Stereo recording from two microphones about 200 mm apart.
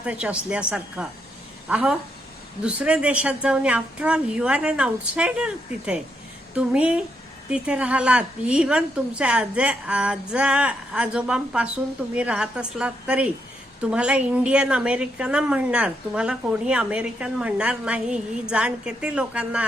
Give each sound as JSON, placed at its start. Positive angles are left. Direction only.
{"t": 0.0, "sound": "a woman's voice", "side_deg": -5}